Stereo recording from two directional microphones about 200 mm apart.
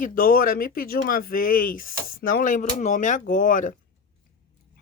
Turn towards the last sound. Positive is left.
turn(degrees=40)  # may be behind; listen again after turning